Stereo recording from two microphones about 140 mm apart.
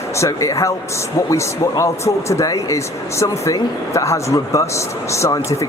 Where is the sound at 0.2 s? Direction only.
20° left (ahead or behind).